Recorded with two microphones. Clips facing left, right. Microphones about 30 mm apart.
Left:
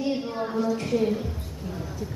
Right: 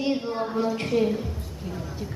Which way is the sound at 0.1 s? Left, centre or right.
Right.